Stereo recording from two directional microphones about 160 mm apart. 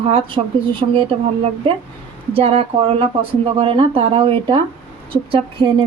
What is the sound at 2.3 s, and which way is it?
A woman's voice, 35° right (ahead or behind).